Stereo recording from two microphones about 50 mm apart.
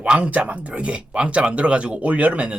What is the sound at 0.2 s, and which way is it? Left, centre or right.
Speech, right.